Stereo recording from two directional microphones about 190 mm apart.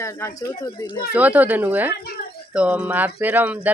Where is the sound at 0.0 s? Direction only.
15° left (ahead or behind).